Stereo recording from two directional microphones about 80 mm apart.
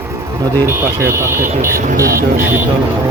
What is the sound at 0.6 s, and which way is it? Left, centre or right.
Speech, right.